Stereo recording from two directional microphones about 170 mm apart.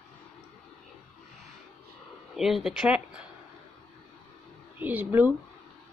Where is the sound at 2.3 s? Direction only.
Centre (ahead or behind).